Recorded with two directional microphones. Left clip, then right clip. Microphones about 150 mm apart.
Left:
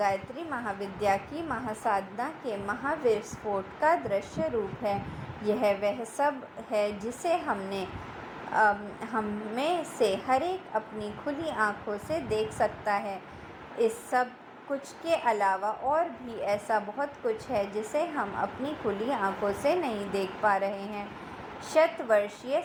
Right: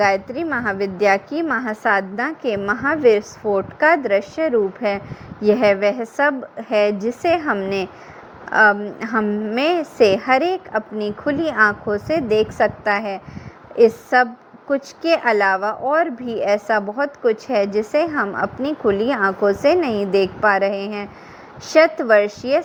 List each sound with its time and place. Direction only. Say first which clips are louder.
0.0 s a woman's voice: right 11 dB; 65° right (ahead or behind)